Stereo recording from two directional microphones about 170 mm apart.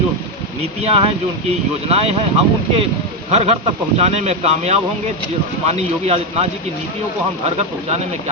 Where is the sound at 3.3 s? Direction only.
40° right (ahead or behind).